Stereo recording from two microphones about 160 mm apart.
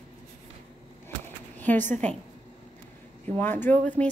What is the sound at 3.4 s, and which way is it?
Speech, 10° left (ahead or behind).